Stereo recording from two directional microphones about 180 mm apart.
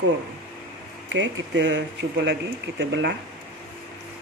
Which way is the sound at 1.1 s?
85° right.